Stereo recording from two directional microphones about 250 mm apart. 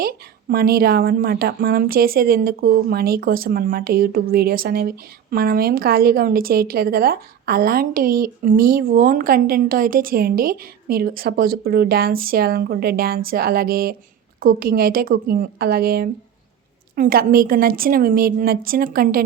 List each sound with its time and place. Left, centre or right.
0.0 s a woman's voice: right